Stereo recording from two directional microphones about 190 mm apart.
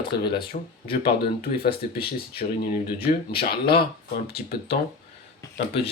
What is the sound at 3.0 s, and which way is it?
Speech, 55° left (ahead or behind).